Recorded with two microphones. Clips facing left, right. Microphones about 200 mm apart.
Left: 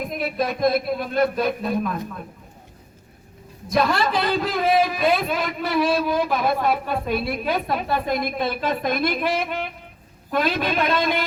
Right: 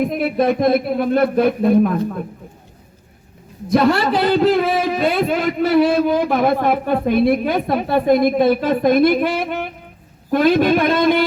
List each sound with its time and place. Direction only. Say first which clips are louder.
0.1 s speech: right 8 dB; 60° right (ahead or behind)
3.7 s a man's voice: right 6 dB; 65° right (ahead or behind); by 11.3 s 50° right (ahead or behind)